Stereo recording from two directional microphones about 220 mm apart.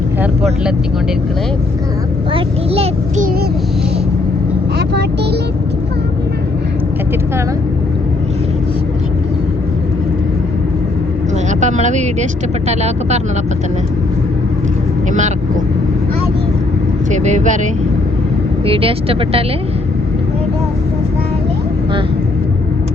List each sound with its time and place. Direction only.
2.3 s a child's voice: 25° right (ahead or behind)
11.6 s speech: 30° right (ahead or behind)
17.1 s speech: 35° right (ahead or behind)
18.6 s a child's voice: 25° right (ahead or behind)